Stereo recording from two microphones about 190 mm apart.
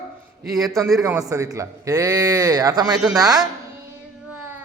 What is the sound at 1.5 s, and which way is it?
A woman's voice, 15° right (ahead or behind).